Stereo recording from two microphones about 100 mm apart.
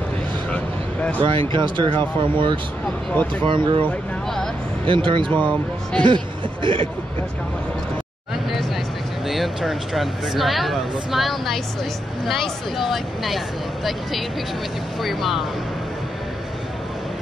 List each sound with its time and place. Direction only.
1.2 s speech: 55° right (ahead or behind)
3.1 s speech: 15° left (ahead or behind)
3.4 s speech: 55° right (ahead or behind)
4.8 s speech: 55° right (ahead or behind)
5.3 s speech: 15° left (ahead or behind)
6.0 s speech: 55° right (ahead or behind)
9.3 s speech: centre (ahead or behind)
15.0 s speech: centre (ahead or behind)